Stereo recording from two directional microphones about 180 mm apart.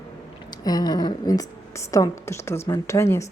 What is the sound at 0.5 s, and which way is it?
A woman's voice, 20° left (ahead or behind).